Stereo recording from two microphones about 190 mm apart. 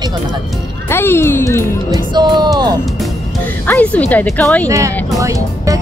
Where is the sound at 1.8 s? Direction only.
20° right (ahead or behind).